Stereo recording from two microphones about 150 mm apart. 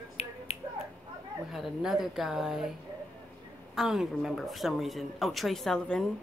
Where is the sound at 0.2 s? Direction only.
45° left (ahead or behind).